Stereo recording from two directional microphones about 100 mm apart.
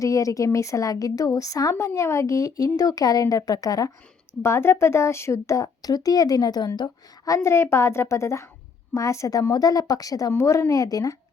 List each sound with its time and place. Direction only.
0.0 s a woman's voice: 35° left (ahead or behind)
4.4 s a woman's voice: 25° left (ahead or behind)